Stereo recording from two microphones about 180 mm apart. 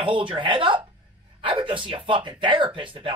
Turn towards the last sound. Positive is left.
turn(degrees=-30)  # may be behind; listen again after turning